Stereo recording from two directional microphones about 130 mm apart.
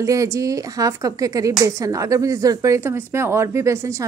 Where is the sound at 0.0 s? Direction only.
25° right (ahead or behind).